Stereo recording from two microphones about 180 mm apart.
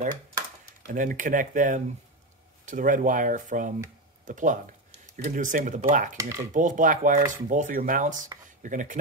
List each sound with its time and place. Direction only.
0.8 s speech: 45° right (ahead or behind)
6.1 s cutlery: 15° right (ahead or behind)
6.5 s speech: 45° right (ahead or behind)